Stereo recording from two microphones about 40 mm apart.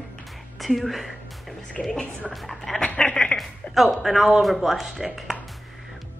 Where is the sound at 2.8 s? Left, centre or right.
Left.